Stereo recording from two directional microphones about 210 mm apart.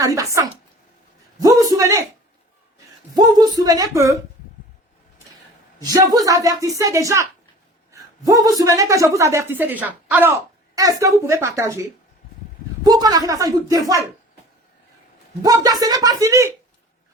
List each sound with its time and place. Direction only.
0.0 s a woman's voice: 15° right (ahead or behind)
1.4 s a sound: 15° right (ahead or behind)
3.2 s a woman's voice: 20° right (ahead or behind)
5.8 s a woman's voice: 15° right (ahead or behind)
15.4 s a woman's voice: 15° right (ahead or behind)